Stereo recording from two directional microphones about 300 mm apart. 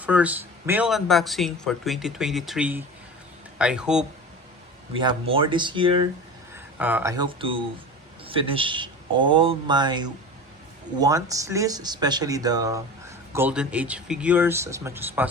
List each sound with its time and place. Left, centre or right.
0.0 s speech: centre
5.3 s speech: centre
6.7 s speech: centre